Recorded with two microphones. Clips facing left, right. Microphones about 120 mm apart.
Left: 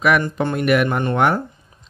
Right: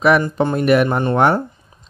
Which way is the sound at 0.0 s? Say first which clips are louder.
Right 3 dB; 30° right (ahead or behind).